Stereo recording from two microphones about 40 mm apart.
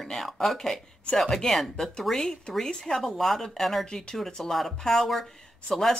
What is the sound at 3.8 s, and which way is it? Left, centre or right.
Speech, centre.